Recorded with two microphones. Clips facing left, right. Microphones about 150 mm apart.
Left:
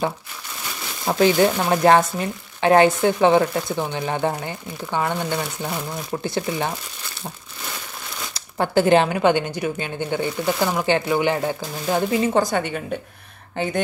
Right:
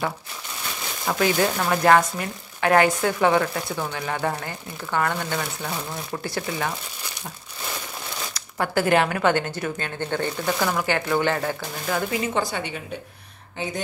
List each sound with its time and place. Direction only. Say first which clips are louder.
1.0 s speech: left 5 dB; 25° left (ahead or behind)
8.3 s speech: left 4 dB; 30° left (ahead or behind)
12.1 s a woman's voice: left 6 dB; 40° left (ahead or behind)